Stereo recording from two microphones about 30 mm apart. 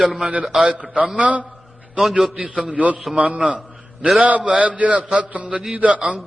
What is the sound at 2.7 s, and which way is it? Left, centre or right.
A man's voice, right.